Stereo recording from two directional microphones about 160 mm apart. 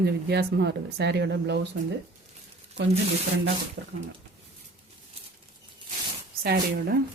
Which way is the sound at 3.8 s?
90° right.